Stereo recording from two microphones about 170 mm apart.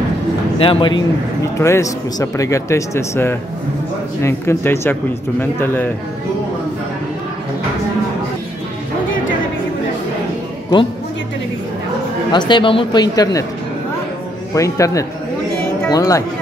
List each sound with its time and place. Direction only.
0.6 s speech: 30° left (ahead or behind)
1.6 s a man's voice: 20° left (ahead or behind)
12.3 s speech: 25° left (ahead or behind)
14.5 s speech: 20° left (ahead or behind)